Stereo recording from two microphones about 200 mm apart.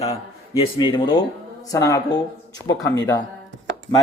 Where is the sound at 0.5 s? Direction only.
25° left (ahead or behind).